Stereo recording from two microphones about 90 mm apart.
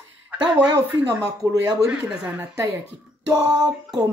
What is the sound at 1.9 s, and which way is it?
Speech, 10° right (ahead or behind).